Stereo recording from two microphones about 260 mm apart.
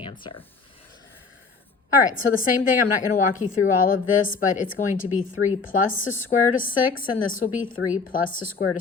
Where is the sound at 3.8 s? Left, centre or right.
Left.